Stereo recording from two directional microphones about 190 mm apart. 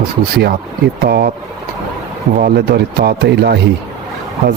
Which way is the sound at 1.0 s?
55° right (ahead or behind).